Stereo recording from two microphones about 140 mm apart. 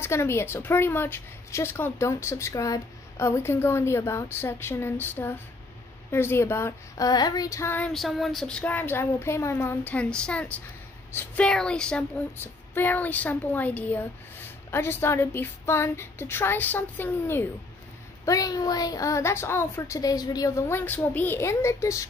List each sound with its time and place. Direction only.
0.0 s a woman's voice: 20° left (ahead or behind)
7.1 s a woman's voice: 30° left (ahead or behind)
7.8 s a woman's voice: centre (ahead or behind)
18.2 s a woman's voice: 25° left (ahead or behind)